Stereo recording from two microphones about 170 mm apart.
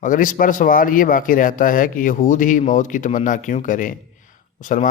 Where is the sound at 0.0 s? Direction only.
50° left (ahead or behind).